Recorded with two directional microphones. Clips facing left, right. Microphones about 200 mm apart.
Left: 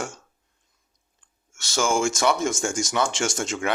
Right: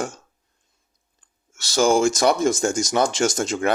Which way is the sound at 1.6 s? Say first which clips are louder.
Right 6 dB; 35° right (ahead or behind).